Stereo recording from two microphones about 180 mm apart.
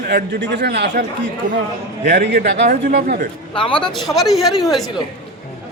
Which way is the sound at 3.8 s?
Centre (ahead or behind).